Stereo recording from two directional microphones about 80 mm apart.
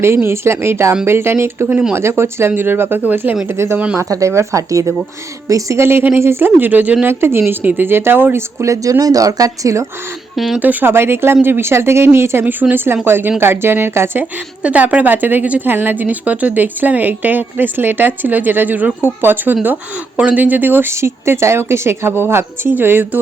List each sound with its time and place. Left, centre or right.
0.2 s speech: right
3.4 s speech: right
10.3 s speech: centre
10.6 s speech: right
14.6 s speech: centre